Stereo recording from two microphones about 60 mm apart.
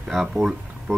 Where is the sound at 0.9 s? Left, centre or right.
Right.